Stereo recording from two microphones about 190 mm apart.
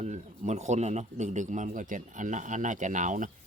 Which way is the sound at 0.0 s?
35° right (ahead or behind).